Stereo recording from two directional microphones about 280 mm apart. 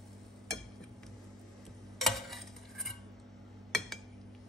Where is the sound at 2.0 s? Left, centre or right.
Centre.